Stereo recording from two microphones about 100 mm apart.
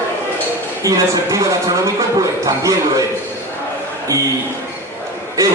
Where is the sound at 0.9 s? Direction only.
35° right (ahead or behind).